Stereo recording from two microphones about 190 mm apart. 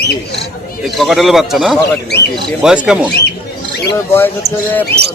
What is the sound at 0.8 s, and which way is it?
Speech, centre (ahead or behind).